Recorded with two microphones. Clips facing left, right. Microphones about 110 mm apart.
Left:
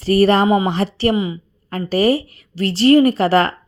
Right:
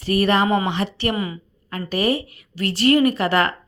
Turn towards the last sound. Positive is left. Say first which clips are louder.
# left 4 dB
turn(degrees=30)  # may be behind; listen again after turning